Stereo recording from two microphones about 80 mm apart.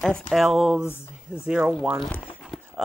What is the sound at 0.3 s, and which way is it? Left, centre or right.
Speech, centre.